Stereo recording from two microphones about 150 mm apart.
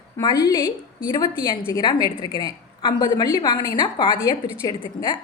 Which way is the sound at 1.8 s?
30° left (ahead or behind).